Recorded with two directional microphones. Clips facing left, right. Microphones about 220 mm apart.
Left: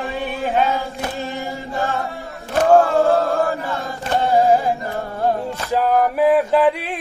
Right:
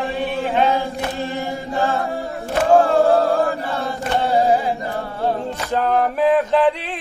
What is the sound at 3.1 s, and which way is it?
Chant, 30° right (ahead or behind).